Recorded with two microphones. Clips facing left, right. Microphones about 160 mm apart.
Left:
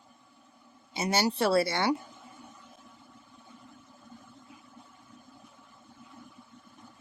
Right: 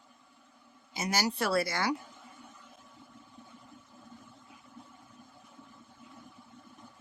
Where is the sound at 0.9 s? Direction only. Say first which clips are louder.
Left 4 dB; 30° left (ahead or behind).